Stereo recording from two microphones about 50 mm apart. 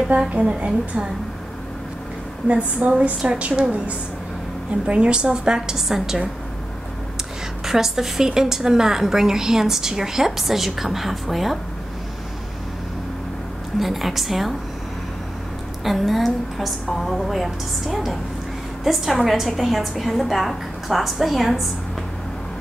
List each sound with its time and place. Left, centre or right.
0.3 s a woman's voice: right
2.4 s a woman's voice: right
4.8 s a woman's voice: right
7.6 s a woman's voice: centre
13.7 s a woman's voice: centre
15.8 s a woman's voice: centre